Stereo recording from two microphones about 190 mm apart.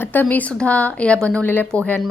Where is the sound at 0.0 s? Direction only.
10° left (ahead or behind).